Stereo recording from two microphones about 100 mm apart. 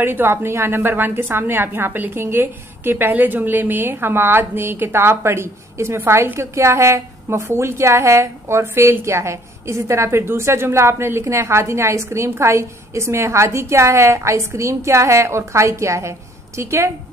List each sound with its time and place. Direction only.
0.0 s a woman's voice: 20° right (ahead or behind)